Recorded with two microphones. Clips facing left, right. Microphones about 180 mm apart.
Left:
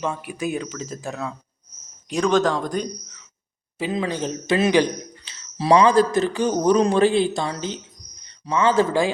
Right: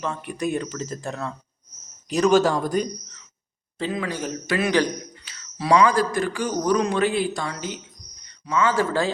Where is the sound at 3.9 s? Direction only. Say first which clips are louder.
Left 5 dB; 25° left (ahead or behind).